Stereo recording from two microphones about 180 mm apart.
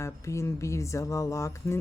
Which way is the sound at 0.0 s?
15° left (ahead or behind).